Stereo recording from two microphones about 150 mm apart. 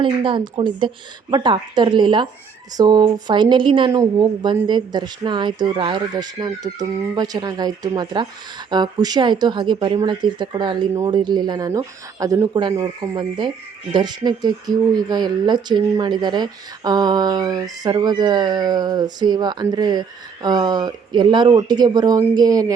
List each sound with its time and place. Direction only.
0.0 s speech: 35° right (ahead or behind)